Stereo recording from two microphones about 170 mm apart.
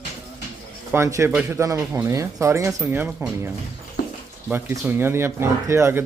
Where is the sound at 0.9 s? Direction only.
15° right (ahead or behind).